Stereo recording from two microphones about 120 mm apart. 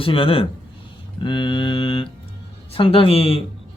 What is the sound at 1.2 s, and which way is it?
Mantra, 40° left (ahead or behind).